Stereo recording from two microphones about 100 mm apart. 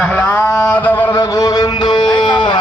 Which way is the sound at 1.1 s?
40° left (ahead or behind).